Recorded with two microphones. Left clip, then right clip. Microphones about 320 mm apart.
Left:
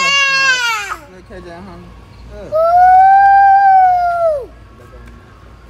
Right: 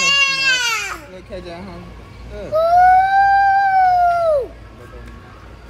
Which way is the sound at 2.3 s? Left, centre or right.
Centre.